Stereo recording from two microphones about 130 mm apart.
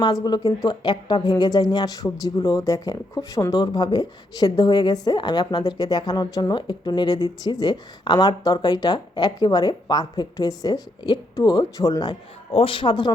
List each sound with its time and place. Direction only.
0.0 s speech: 30° left (ahead or behind)
12.5 s speech: 45° left (ahead or behind)